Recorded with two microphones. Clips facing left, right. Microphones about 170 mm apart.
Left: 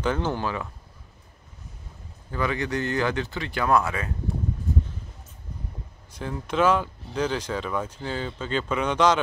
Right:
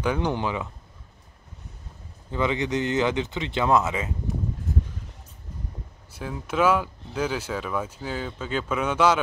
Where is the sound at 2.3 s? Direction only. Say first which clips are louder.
Right 2 dB; 20° right (ahead or behind).